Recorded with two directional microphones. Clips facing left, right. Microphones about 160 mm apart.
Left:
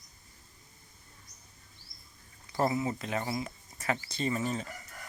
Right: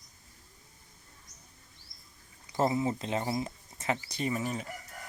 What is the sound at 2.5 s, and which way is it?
Speech, 25° right (ahead or behind).